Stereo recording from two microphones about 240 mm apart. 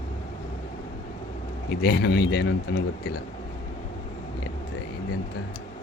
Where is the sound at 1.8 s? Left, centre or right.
Left.